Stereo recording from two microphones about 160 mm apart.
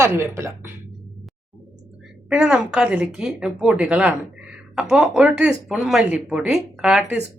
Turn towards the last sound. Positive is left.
turn(degrees=-5)  # may be behind; listen again after turning